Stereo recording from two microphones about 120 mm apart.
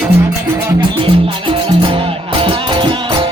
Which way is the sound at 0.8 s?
45° right (ahead or behind).